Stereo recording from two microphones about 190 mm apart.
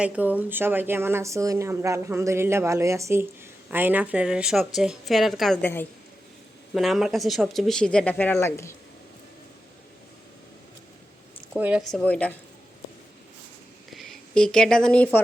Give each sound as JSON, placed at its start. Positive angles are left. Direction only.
{"t": 0.0, "sound": "speech", "side_deg": -10}
{"t": 5.6, "sound": "a woman's voice", "side_deg": 10}
{"t": 6.7, "sound": "speech", "side_deg": 0}
{"t": 11.5, "sound": "speech", "side_deg": -5}
{"t": 13.9, "sound": "speech", "side_deg": 0}